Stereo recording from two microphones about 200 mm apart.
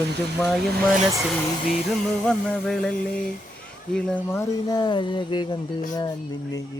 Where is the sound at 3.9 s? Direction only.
10° left (ahead or behind).